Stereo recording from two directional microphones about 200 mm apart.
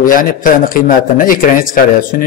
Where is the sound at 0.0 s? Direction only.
45° left (ahead or behind).